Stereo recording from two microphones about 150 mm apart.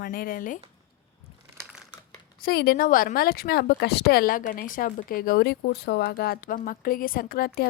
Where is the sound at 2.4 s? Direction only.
90° left.